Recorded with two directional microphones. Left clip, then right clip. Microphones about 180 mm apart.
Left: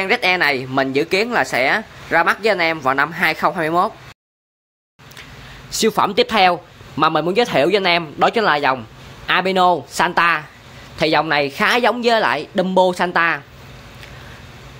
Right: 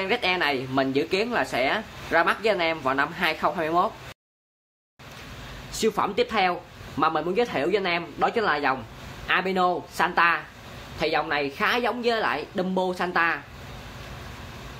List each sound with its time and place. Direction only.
0.0 s a woman's voice: 30° left (ahead or behind)
5.7 s a woman's voice: 30° left (ahead or behind); by 13.4 s 50° left (ahead or behind)